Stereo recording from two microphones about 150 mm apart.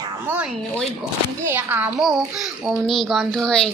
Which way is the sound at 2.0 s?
Centre (ahead or behind).